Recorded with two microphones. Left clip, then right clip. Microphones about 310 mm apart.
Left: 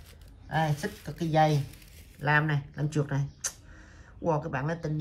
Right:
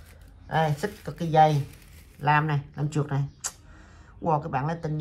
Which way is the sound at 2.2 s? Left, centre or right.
Right.